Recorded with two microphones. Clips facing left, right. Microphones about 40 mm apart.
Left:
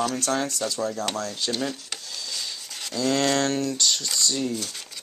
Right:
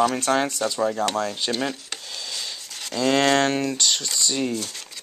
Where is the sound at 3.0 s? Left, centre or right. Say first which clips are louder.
Right 4 dB; right.